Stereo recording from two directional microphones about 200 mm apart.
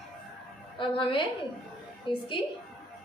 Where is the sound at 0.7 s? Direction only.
25° left (ahead or behind).